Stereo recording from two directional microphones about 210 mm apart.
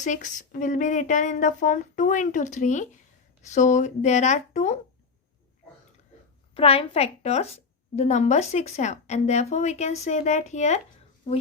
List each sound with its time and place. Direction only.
0.0 s speech: 35° left (ahead or behind)
6.5 s speech: 25° left (ahead or behind)